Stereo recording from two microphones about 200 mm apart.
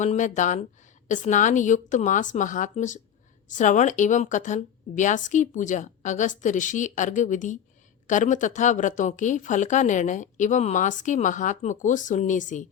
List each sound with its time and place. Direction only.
0.0 s speech: 35° left (ahead or behind)